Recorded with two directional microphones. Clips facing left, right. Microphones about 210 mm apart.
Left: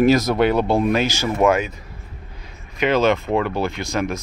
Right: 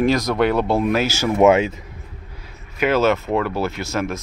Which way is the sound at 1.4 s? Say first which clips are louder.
Right 4 dB; 25° right (ahead or behind).